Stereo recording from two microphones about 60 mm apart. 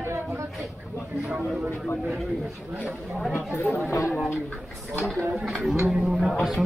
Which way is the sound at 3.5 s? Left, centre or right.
Left.